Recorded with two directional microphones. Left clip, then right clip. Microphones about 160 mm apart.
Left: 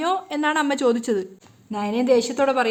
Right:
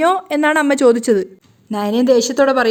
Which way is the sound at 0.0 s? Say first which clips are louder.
Right 8 dB; 35° right (ahead or behind).